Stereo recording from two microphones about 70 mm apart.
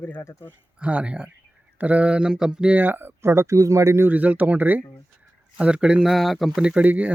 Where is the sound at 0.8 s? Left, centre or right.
Centre.